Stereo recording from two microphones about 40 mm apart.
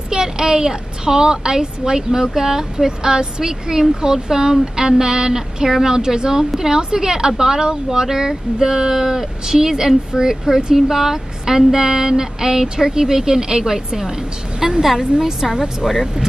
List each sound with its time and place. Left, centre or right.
0.1 s a woman's voice: centre